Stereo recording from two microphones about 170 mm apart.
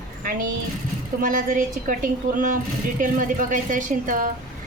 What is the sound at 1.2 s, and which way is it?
A woman's voice, 50° right (ahead or behind).